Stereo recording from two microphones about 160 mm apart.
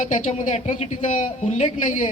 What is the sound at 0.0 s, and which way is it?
Speech, 50° left (ahead or behind).